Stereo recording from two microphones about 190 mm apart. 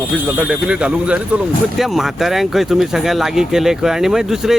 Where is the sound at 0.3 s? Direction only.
5° right (ahead or behind).